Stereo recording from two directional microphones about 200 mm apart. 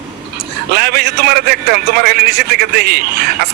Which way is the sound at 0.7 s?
50° right (ahead or behind).